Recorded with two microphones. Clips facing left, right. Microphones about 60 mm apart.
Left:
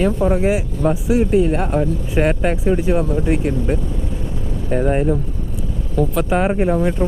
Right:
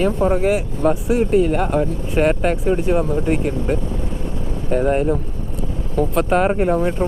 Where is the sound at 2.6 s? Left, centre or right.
Left.